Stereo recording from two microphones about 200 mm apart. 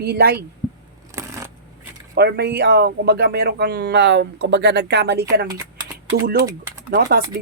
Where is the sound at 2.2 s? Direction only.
55° right (ahead or behind).